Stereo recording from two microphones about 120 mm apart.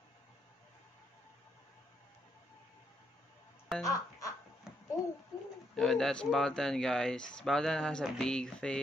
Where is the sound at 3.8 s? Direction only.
30° left (ahead or behind).